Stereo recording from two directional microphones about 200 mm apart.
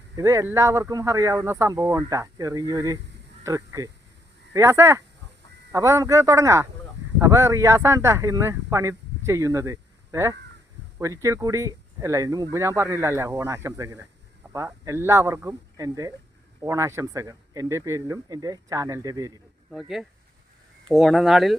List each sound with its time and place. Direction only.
0.2 s speech: 15° right (ahead or behind)
19.7 s speech: centre (ahead or behind)